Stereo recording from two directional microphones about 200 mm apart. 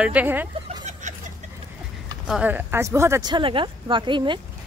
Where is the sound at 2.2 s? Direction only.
5° right (ahead or behind); by 4.4 s 25° right (ahead or behind).